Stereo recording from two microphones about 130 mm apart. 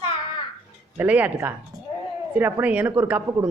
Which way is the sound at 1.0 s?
10° right (ahead or behind).